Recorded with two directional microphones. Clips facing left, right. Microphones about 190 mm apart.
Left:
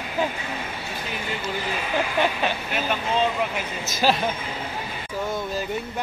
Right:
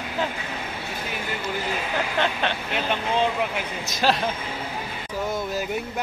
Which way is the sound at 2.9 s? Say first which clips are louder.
Even; 15° right (ahead or behind).